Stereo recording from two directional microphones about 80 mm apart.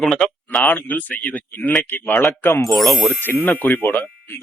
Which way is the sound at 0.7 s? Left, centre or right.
Left.